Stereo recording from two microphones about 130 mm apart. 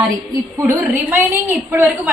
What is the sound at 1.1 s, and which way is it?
A woman's voice, 15° right (ahead or behind).